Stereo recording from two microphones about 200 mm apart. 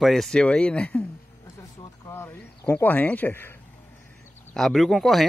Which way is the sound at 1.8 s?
15° left (ahead or behind).